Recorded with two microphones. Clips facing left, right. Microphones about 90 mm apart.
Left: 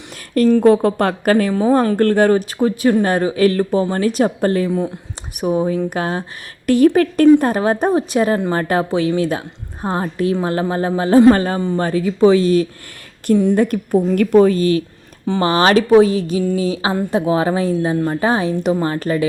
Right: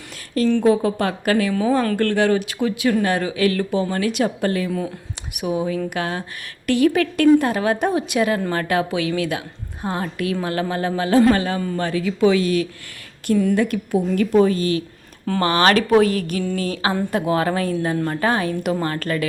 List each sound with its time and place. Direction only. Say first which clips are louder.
0.3 s speech: left 5 dB; 45° left (ahead or behind)
1.3 s speech: left 4 dB; 40° left (ahead or behind)
8.4 s speech: left 4 dB; 20° left (ahead or behind)
8.6 s speech: left 4 dB; 35° left (ahead or behind)
11.6 s speech: left 5 dB; 25° left (ahead or behind)
11.9 s speech: left 5 dB; 35° left (ahead or behind)
15.3 s speech: left 3 dB; 20° left (ahead or behind)
16.4 s a sound: left 5 dB; 10° left (ahead or behind)
16.7 s speech: left 3 dB; 20° left (ahead or behind)